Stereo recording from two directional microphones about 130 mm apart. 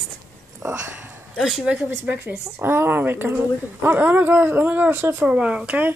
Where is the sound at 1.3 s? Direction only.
5° right (ahead or behind).